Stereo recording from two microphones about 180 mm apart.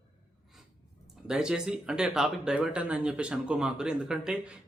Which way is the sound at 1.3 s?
5° right (ahead or behind).